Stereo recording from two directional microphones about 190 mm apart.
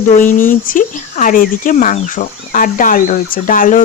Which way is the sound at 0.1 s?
40° left (ahead or behind).